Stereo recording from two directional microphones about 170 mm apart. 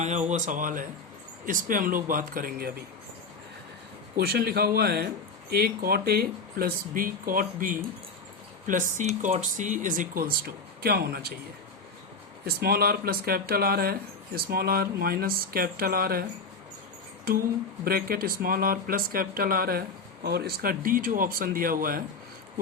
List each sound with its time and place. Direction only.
0.0 s speech: 45° right (ahead or behind)
4.2 s speech: 70° right (ahead or behind)
12.5 s speech: 65° right (ahead or behind)
17.3 s speech: 60° right (ahead or behind)